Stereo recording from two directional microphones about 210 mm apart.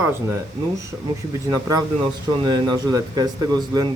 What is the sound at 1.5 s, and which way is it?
Speech, 15° right (ahead or behind).